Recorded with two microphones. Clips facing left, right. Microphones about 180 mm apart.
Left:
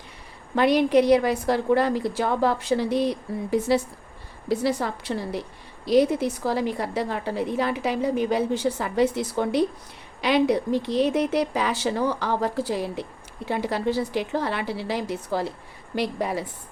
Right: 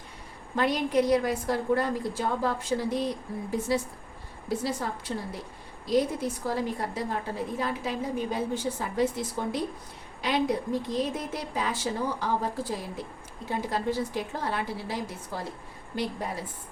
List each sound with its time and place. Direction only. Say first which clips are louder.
0.5 s a woman's voice: left 7 dB; 75° left (ahead or behind)